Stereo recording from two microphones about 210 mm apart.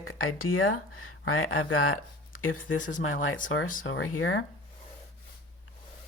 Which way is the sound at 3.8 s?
70° left (ahead or behind).